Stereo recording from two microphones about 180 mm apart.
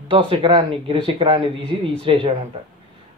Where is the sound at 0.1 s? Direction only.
30° right (ahead or behind).